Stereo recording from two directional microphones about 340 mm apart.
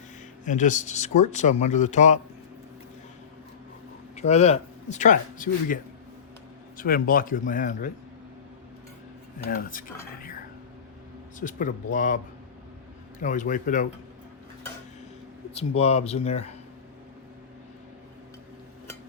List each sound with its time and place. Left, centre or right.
0.4 s speech: left
4.1 s speech: centre
9.4 s speech: left
11.3 s speech: left
15.5 s speech: centre